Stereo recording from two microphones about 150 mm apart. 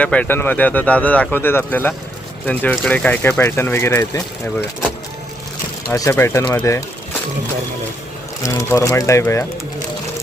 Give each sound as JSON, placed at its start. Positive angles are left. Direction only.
{"t": 0.0, "sound": "speech", "side_deg": 10}
{"t": 5.9, "sound": "speech", "side_deg": 20}
{"t": 8.4, "sound": "speech", "side_deg": 20}